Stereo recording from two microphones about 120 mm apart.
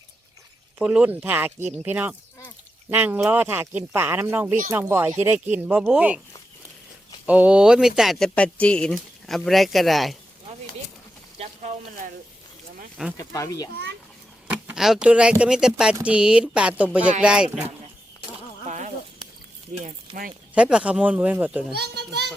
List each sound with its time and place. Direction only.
0.8 s speech: 10° right (ahead or behind)
7.3 s speech: 10° right (ahead or behind)
8.4 s speech: 10° left (ahead or behind)
11.3 s a sound: 70° right (ahead or behind)
13.1 s speech: 30° left (ahead or behind)
14.5 s speech: 5° right (ahead or behind)
18.7 s a sound: 70° right (ahead or behind)
20.6 s speech: 10° right (ahead or behind)